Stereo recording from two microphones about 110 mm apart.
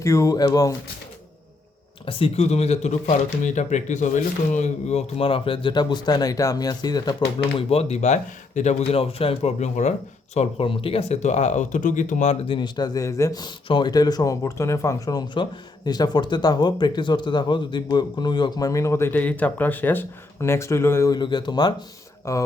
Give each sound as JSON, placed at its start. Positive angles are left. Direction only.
{"t": 0.0, "sound": "speech", "side_deg": 30}
{"t": 2.0, "sound": "speech", "side_deg": 55}
{"t": 7.3, "sound": "speech", "side_deg": 60}
{"t": 8.9, "sound": "speech", "side_deg": 60}
{"t": 10.7, "sound": "speech", "side_deg": 55}
{"t": 12.5, "sound": "speech", "side_deg": 45}
{"t": 13.7, "sound": "speech", "side_deg": 45}
{"t": 21.1, "sound": "speech", "side_deg": 40}
{"t": 22.3, "sound": "speech", "side_deg": 25}